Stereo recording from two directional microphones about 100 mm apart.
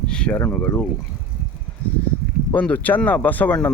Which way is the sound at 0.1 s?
10° left (ahead or behind).